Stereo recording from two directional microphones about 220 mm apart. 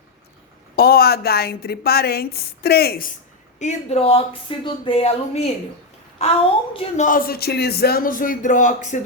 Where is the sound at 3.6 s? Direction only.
30° left (ahead or behind).